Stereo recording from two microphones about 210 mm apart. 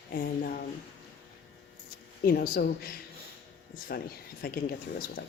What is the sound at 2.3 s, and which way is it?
A woman's voice, 45° left (ahead or behind).